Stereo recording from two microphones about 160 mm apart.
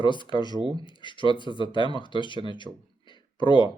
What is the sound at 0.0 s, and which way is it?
Speech, 30° left (ahead or behind).